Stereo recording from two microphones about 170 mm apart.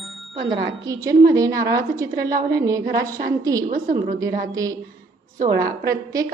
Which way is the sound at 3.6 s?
50° right (ahead or behind).